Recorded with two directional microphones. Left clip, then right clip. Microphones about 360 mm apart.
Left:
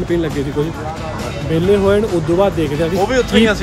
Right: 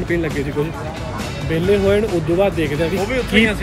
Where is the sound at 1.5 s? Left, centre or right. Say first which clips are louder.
Left 3 dB; centre.